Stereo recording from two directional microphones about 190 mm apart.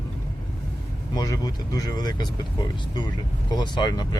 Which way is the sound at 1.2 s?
20° left (ahead or behind).